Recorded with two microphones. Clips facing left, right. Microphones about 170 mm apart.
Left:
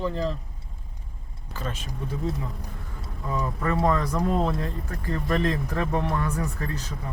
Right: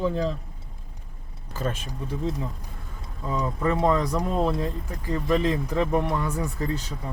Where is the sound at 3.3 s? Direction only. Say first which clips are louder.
Right 2 dB; 20° right (ahead or behind).